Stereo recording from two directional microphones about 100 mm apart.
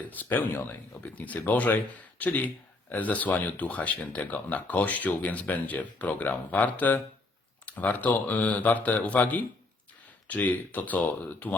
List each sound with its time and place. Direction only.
0.1 s speech: 20° left (ahead or behind)